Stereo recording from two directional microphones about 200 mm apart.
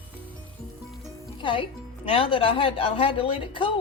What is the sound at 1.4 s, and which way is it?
A woman's voice, 25° left (ahead or behind).